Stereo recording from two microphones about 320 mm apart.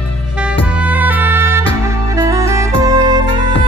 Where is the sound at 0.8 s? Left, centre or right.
Centre.